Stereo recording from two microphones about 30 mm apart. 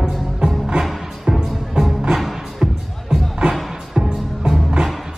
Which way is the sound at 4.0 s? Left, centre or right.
Right.